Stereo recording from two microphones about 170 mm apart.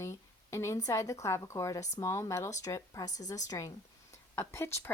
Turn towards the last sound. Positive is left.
turn(degrees=15)  # may be behind; listen again after turning